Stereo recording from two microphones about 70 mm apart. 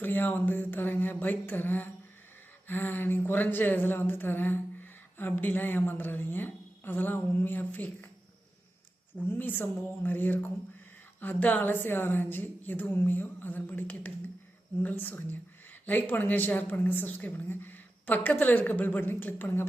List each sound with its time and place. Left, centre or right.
0.0 s speech: left
9.1 s speech: left